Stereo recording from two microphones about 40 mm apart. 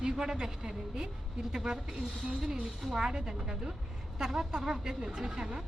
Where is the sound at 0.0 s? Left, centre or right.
Centre.